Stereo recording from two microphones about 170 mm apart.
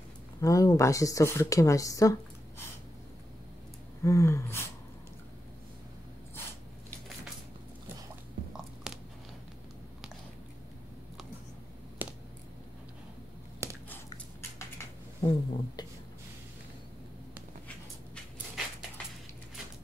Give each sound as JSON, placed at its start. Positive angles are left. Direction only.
{"t": 0.4, "sound": "speech", "side_deg": 20}
{"t": 4.0, "sound": "a sound", "side_deg": 20}
{"t": 8.9, "sound": "biting", "side_deg": 0}
{"t": 13.6, "sound": "biting", "side_deg": -15}
{"t": 15.2, "sound": "speech", "side_deg": 25}